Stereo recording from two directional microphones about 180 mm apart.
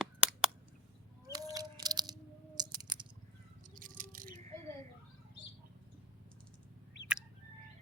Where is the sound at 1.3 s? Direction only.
20° right (ahead or behind).